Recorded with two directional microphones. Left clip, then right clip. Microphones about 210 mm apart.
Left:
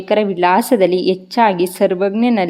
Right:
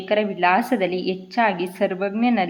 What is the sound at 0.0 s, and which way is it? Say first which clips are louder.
A woman's voice: left 5 dB; 50° left (ahead or behind).